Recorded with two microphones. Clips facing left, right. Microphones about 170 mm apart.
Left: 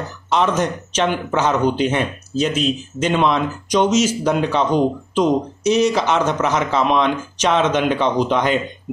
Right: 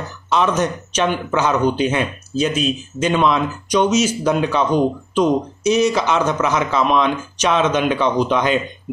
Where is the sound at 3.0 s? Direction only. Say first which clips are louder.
Right 1 dB; 20° left (ahead or behind).